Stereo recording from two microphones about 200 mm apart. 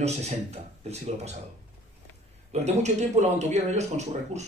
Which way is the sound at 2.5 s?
35° right (ahead or behind).